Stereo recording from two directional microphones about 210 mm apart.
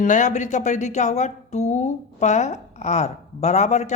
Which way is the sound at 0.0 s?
35° left (ahead or behind).